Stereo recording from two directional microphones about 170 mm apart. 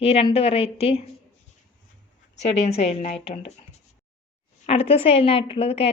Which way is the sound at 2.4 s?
40° left (ahead or behind).